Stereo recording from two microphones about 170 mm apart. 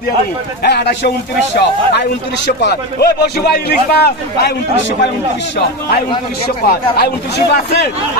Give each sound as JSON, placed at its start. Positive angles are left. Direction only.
{"t": 0.6, "sound": "a man's voice", "side_deg": 75}
{"t": 6.7, "sound": "a man's voice", "side_deg": 70}